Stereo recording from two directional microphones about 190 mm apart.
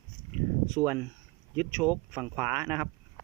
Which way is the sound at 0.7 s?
15° right (ahead or behind).